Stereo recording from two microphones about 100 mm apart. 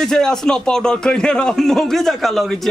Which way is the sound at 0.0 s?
5° left (ahead or behind).